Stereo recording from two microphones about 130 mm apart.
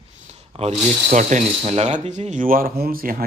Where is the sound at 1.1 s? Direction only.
70° right (ahead or behind).